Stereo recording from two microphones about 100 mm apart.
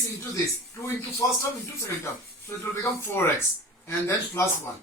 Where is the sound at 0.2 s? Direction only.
30° left (ahead or behind).